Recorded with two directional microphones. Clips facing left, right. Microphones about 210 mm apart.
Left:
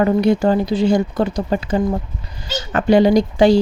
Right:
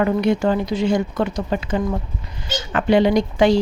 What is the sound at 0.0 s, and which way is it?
Speech, 35° left (ahead or behind).